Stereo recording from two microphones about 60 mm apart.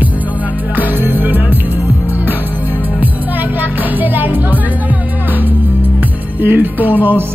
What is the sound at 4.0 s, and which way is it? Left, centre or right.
Music, right.